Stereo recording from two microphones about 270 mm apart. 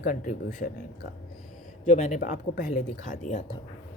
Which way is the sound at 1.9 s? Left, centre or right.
Left.